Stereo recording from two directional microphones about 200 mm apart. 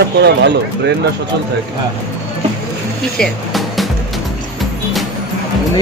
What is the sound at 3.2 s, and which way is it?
Music, centre (ahead or behind).